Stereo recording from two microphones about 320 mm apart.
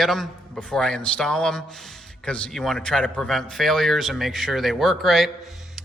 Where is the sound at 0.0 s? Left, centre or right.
Centre.